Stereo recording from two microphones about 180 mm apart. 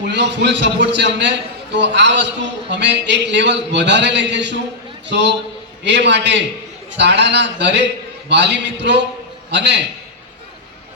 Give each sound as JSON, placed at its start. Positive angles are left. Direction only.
{"t": 0.0, "sound": "a man's voice", "side_deg": -75}